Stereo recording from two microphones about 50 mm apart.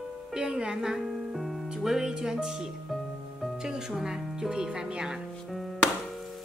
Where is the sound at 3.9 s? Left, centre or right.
Centre.